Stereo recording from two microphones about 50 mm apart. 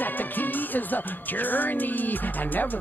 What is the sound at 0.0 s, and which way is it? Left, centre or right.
Music, left.